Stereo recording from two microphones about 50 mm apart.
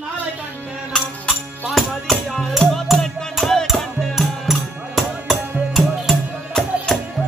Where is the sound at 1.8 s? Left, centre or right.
Centre.